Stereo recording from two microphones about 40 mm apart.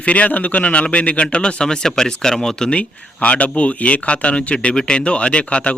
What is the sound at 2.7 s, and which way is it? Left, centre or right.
Speech, left.